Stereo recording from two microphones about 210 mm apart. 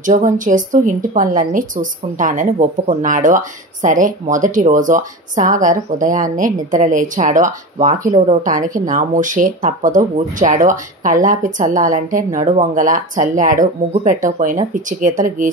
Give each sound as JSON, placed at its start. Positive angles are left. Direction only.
{"t": 0.0, "sound": "speech", "side_deg": -35}